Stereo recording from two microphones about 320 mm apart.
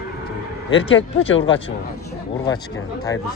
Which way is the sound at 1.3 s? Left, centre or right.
Left.